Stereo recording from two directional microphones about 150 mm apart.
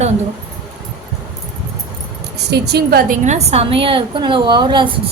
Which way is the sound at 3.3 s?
45° right (ahead or behind).